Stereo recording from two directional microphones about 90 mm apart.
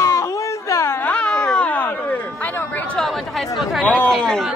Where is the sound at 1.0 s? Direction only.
10° left (ahead or behind).